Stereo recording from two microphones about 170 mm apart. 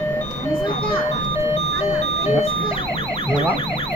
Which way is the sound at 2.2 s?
35° left (ahead or behind).